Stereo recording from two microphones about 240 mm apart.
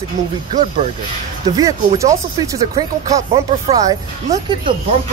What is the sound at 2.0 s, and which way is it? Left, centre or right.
Speech, centre.